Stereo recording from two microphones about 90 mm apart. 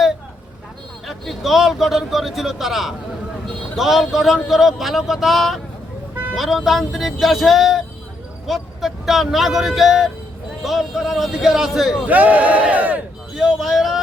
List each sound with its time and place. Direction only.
1.0 s a man's voice: centre (ahead or behind)
12.0 s speech: 15° right (ahead or behind)
13.3 s speech: 5° right (ahead or behind)